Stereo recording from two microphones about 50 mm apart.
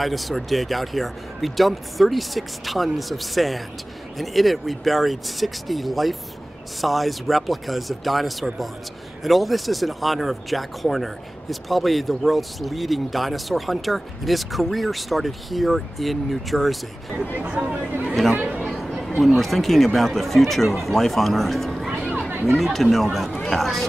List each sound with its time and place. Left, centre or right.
0.0 s speech: centre
17.5 s speech: centre
18.8 s chatter: centre
19.2 s speech: centre